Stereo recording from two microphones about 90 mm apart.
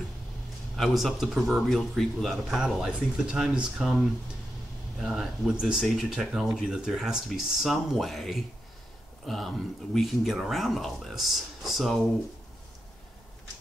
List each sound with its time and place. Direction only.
0.7 s speech: centre (ahead or behind)